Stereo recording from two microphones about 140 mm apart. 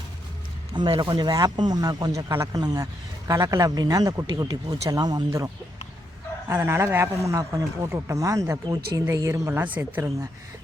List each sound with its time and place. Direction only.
0.9 s a man's voice: 30° right (ahead or behind)
6.5 s a man's voice: 20° right (ahead or behind)